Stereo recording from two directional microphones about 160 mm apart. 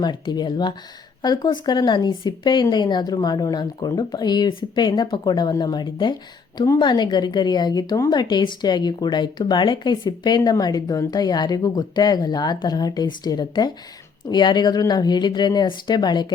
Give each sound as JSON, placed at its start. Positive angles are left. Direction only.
{"t": 0.0, "sound": "speech", "side_deg": 25}